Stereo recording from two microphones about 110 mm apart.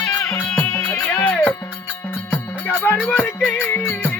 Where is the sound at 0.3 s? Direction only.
10° left (ahead or behind).